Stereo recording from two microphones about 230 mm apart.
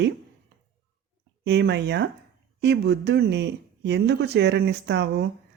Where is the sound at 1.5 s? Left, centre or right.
Right.